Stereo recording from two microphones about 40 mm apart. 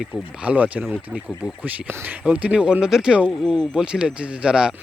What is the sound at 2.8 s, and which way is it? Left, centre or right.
Speech, centre.